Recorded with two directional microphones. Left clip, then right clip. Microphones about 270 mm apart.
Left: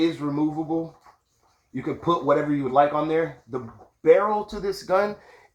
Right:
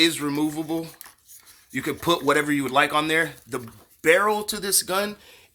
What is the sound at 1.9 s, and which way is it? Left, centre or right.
Speech, right.